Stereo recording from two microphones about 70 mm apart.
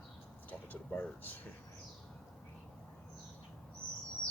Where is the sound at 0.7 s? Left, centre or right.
Centre.